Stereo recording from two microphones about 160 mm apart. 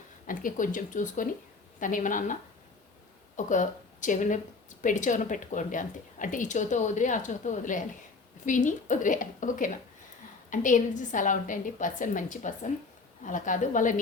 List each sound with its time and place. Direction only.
0.3 s a woman's voice: 55° left (ahead or behind)